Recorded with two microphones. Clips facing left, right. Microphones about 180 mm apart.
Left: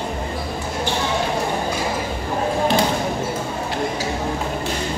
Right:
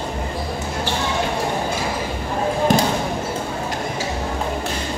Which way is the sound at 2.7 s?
45° right (ahead or behind).